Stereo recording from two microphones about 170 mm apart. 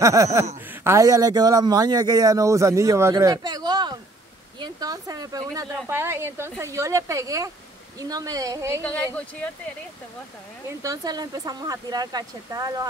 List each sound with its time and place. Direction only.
0.0 s speech: 20° right (ahead or behind)
8.8 s speech: 10° left (ahead or behind)
10.8 s speech: 20° right (ahead or behind)